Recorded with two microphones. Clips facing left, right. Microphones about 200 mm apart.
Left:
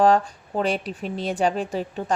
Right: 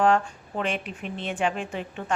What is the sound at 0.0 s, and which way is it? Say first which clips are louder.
Speech: left 4 dB; 35° left (ahead or behind).